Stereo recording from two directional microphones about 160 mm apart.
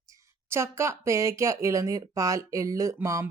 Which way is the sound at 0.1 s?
15° right (ahead or behind).